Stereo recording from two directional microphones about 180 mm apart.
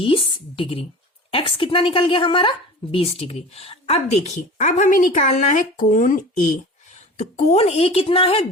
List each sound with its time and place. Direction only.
0.0 s a woman's voice: 30° left (ahead or behind); by 6.5 s 45° left (ahead or behind)
7.2 s a woman's voice: 35° left (ahead or behind)